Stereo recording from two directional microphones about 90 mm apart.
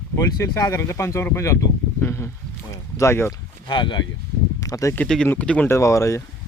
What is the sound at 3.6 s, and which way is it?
Speech, 60° left (ahead or behind).